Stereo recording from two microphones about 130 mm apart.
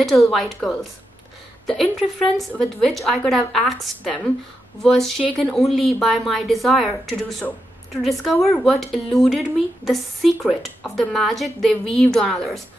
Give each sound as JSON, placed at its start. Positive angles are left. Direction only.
{"t": 0.0, "sound": "speech", "side_deg": 0}
{"t": 10.4, "sound": "speech", "side_deg": 0}